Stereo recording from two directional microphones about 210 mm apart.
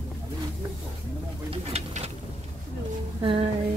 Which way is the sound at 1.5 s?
30° right (ahead or behind).